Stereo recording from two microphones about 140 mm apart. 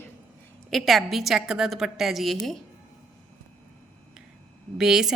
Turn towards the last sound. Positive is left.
turn(degrees=-5)  # may be behind; listen again after turning